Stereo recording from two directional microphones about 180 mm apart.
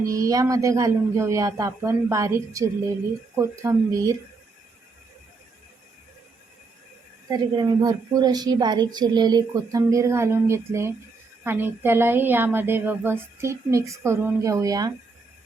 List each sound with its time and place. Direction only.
0.0 s a woman's voice: 20° right (ahead or behind)
7.3 s a woman's voice: 20° right (ahead or behind)